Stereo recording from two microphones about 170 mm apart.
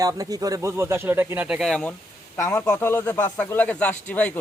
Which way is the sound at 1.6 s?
5° left (ahead or behind).